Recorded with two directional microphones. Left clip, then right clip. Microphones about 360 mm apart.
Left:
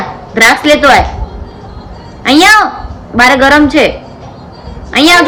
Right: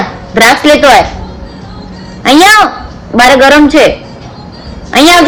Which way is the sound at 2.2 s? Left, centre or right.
Centre.